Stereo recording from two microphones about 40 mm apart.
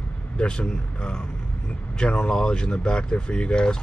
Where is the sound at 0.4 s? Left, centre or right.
Left.